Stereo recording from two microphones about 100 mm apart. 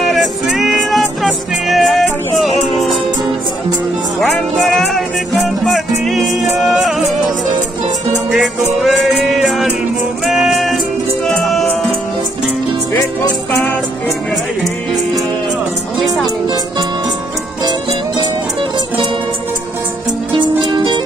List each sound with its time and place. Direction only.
0.0 s music: centre (ahead or behind)
4.2 s music: centre (ahead or behind)
20.3 s music: 55° right (ahead or behind)